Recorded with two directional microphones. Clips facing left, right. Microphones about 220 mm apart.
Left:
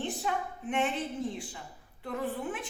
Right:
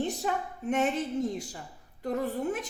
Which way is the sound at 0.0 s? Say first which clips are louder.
Right 3 dB; 40° right (ahead or behind).